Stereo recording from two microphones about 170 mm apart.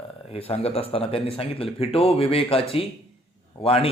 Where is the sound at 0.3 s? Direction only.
35° left (ahead or behind).